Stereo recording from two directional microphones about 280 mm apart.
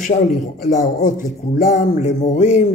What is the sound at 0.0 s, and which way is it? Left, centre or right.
Speech, left.